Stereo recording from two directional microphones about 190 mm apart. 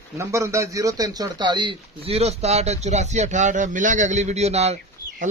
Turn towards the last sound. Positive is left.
turn(degrees=-35)  # may be behind; listen again after turning